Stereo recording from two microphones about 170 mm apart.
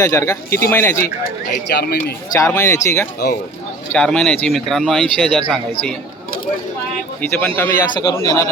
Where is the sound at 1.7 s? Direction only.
65° left (ahead or behind).